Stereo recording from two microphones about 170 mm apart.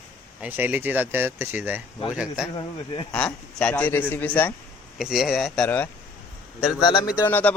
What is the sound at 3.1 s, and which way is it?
A man's voice, 5° left (ahead or behind).